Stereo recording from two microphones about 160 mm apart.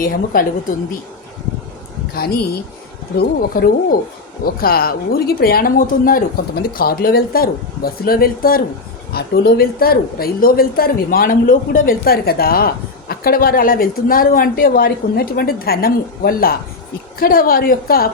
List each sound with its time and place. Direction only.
0.0 s a woman's voice: 65° left (ahead or behind)
2.1 s speech: 80° left
3.2 s speech: 70° left (ahead or behind)
9.1 s speech: 85° left